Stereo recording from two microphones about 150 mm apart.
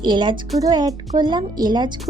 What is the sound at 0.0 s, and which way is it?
Speech, 30° right (ahead or behind).